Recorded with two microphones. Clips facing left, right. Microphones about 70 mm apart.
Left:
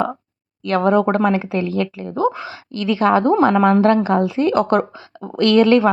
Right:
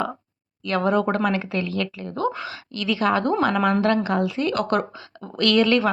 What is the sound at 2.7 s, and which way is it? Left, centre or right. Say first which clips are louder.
A woman's voice: left 6 dB; left.